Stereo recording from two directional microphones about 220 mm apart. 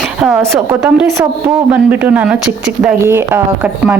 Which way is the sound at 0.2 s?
5° right (ahead or behind).